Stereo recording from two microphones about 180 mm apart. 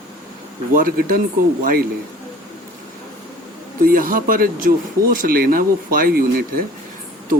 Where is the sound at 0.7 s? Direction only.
55° right (ahead or behind).